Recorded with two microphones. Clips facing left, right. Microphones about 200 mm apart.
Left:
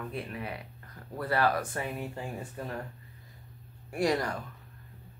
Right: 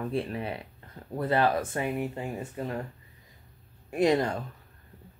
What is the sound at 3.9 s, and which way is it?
Speech, 20° right (ahead or behind).